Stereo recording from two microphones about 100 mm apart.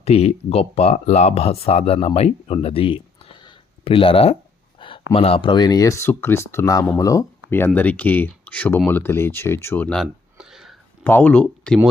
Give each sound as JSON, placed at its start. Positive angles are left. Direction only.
{"t": 0.0, "sound": "speech", "side_deg": 90}
{"t": 4.8, "sound": "a sound", "side_deg": 55}
{"t": 5.1, "sound": "speech", "side_deg": 70}
{"t": 5.5, "sound": "speech", "side_deg": 45}
{"t": 7.5, "sound": "speech", "side_deg": 20}
{"t": 10.3, "sound": "a sound", "side_deg": -5}
{"t": 11.0, "sound": "speech", "side_deg": 15}